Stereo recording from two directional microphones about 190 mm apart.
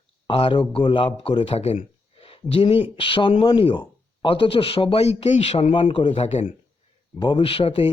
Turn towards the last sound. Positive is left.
turn(degrees=30)  # may be behind; listen again after turning